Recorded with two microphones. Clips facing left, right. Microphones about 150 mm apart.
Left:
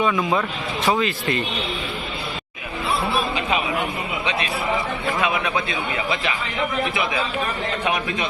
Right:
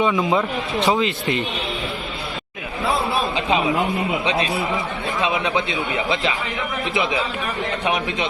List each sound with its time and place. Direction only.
0.0 s speech: 20° right (ahead or behind)
4.3 s speech: 30° right (ahead or behind)